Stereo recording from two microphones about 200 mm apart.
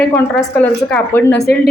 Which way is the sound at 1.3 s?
55° left (ahead or behind).